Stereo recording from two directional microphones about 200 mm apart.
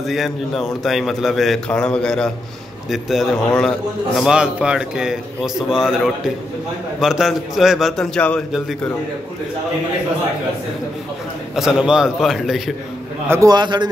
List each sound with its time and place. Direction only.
0.0 s a man's voice: centre (ahead or behind)
11.5 s a man's voice: 5° right (ahead or behind)
13.3 s a man's voice: 15° right (ahead or behind)